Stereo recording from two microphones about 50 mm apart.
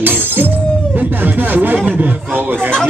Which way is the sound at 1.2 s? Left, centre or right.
Right.